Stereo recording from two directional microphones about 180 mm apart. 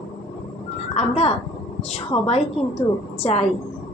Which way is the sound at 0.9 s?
35° left (ahead or behind).